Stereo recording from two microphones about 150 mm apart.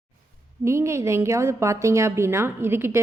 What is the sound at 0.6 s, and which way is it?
A woman's voice, 20° right (ahead or behind).